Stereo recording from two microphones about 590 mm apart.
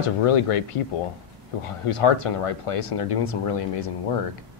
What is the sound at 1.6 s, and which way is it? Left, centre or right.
Speech, left.